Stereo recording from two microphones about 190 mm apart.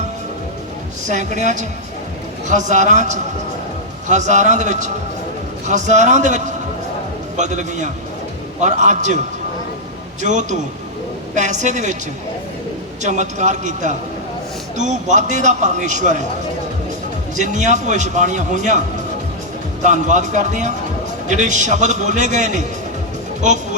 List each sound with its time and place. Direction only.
1.0 s a man's voice: 40° right (ahead or behind)
10.2 s a man's voice: 40° right (ahead or behind)
13.0 s a man's voice: 40° right (ahead or behind)
17.3 s a man's voice: 40° right (ahead or behind)
19.8 s a man's voice: 40° right (ahead or behind)